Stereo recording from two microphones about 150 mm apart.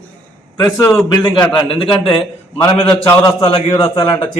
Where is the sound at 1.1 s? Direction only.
30° left (ahead or behind).